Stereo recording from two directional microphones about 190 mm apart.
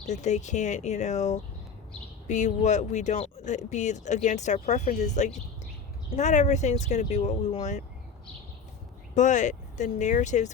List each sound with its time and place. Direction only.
0.0 s speech: 40° left (ahead or behind)
9.1 s speech: 40° left (ahead or behind)